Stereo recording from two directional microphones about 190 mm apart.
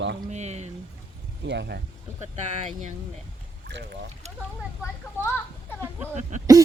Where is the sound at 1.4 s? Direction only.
65° right (ahead or behind).